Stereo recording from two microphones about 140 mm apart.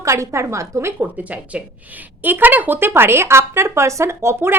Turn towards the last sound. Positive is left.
turn(degrees=-20)  # may be behind; listen again after turning